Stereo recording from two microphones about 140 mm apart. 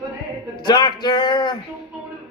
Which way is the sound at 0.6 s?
30° left (ahead or behind).